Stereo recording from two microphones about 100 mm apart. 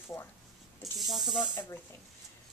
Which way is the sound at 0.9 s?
Centre (ahead or behind).